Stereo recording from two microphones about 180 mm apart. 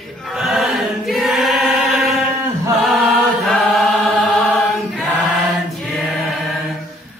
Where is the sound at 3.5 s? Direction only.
Centre (ahead or behind).